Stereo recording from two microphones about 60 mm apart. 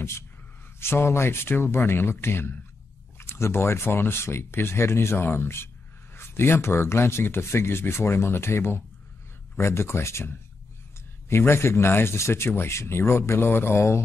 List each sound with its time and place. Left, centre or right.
0.7 s speech: left